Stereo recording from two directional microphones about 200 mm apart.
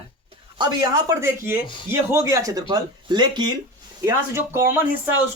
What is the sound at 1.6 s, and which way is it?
Speech, 25° left (ahead or behind).